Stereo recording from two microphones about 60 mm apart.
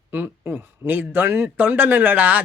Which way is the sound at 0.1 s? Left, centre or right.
Right.